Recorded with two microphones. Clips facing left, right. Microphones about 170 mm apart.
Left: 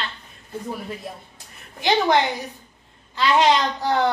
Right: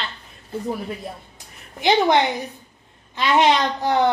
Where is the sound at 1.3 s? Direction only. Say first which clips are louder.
Right 2 dB; 20° right (ahead or behind).